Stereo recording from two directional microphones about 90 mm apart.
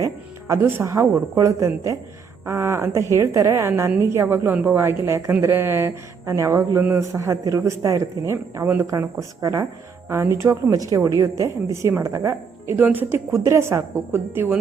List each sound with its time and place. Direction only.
0.0 s a woman's voice: 35° right (ahead or behind)
8.6 s a woman's voice: 25° right (ahead or behind)
8.9 s speech: 40° right (ahead or behind)